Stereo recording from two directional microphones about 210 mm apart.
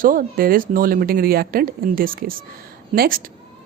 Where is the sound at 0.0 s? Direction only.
40° right (ahead or behind).